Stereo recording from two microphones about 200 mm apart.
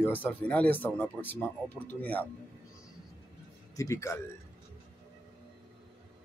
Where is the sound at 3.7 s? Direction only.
15° left (ahead or behind).